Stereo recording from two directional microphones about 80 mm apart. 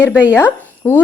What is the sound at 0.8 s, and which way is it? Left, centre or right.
Speech, left.